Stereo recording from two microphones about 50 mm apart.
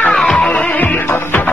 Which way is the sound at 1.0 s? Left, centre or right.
Left.